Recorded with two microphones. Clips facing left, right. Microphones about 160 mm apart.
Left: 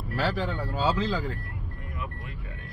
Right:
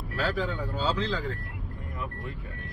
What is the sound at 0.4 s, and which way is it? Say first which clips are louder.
Speech: left 1 dB; centre (ahead or behind).